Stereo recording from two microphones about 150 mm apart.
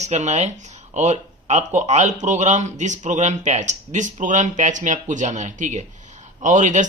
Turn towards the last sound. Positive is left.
turn(degrees=-55)  # may be behind; listen again after turning